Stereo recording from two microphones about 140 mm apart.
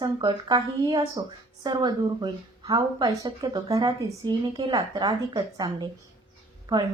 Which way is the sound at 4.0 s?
30° right (ahead or behind).